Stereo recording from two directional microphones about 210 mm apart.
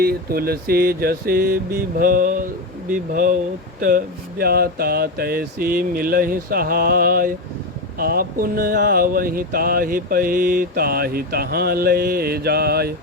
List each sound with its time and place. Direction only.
0.0 s speech: 45° right (ahead or behind)